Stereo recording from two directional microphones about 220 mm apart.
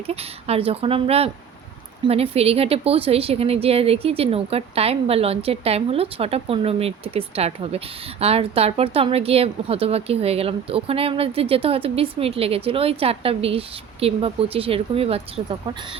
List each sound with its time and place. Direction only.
0.1 s a woman's voice: 25° right (ahead or behind)